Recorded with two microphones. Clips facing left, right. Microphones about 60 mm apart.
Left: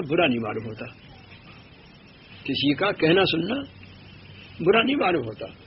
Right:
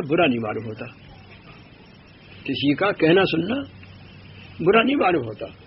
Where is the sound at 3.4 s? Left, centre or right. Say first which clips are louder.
Right 3 dB; right.